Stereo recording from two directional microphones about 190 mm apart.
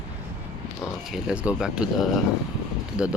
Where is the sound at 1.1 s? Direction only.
5° right (ahead or behind).